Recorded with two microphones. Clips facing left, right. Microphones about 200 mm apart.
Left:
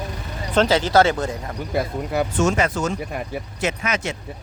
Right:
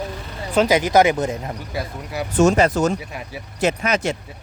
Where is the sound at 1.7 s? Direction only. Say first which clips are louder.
Left 7 dB; 55° left (ahead or behind).